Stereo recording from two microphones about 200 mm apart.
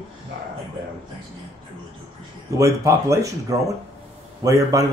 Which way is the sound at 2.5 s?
15° right (ahead or behind).